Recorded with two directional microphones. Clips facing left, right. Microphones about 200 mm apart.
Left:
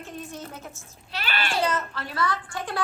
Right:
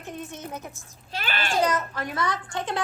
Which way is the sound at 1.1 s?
45° right (ahead or behind).